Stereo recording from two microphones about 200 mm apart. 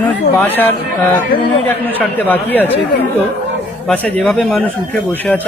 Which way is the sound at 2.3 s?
10° left (ahead or behind).